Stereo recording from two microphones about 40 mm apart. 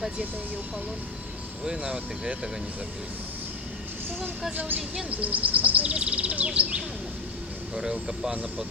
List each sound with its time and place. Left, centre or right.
1.6 s speech: centre
4.7 s speech: right
5.1 s speech: right; by 8.4 s centre